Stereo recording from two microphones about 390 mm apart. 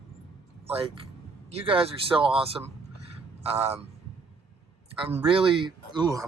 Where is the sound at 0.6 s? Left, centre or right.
Centre.